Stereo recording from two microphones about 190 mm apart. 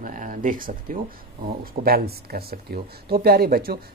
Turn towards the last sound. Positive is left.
turn(degrees=-50)  # may be behind; listen again after turning